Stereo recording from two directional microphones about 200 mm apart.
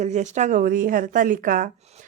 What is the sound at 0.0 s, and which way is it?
Speech, 35° right (ahead or behind).